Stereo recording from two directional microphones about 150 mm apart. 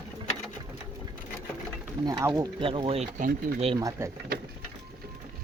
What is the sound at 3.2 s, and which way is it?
Speech, 65° right (ahead or behind).